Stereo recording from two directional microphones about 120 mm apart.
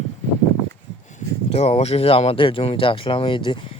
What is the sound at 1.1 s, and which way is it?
Speech, 60° left (ahead or behind).